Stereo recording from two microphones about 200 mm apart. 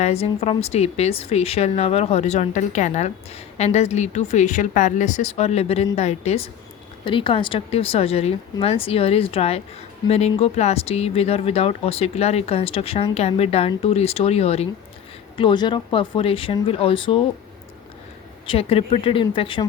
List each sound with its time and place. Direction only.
0.0 s speech: 30° left (ahead or behind)
18.4 s speech: 30° left (ahead or behind)